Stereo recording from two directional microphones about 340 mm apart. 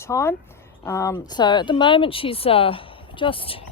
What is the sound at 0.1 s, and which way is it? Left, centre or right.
Speech, centre.